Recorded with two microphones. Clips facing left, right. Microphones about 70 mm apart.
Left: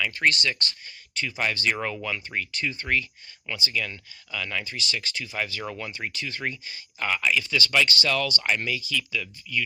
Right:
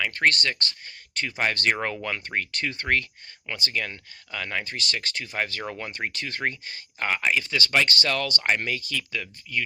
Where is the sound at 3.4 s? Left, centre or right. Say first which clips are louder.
Even; right.